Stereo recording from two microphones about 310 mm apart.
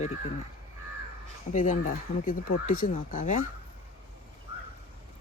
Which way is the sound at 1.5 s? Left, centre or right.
Left.